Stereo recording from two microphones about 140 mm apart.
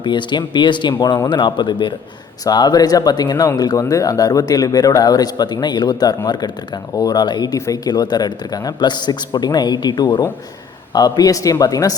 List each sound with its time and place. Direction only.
0.0 s speech: 35° left (ahead or behind)